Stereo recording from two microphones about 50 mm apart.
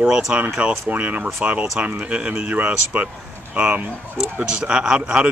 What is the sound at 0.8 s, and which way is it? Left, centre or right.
Speech, right.